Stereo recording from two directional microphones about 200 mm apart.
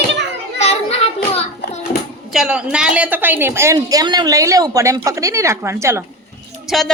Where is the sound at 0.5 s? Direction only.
30° left (ahead or behind).